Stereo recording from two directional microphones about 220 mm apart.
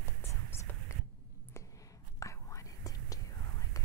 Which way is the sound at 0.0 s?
10° left (ahead or behind).